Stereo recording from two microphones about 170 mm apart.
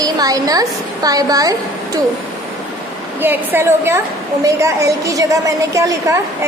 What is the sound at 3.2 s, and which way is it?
A woman's voice, 15° right (ahead or behind).